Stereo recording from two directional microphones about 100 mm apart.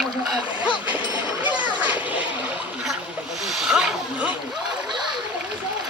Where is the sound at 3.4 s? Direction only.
5° right (ahead or behind).